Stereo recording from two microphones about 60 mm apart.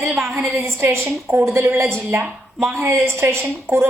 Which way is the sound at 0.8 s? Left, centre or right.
Right.